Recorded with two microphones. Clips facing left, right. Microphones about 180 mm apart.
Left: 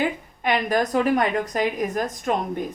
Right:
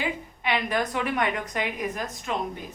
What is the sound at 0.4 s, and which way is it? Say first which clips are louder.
A woman's voice: left 5 dB; 45° left (ahead or behind).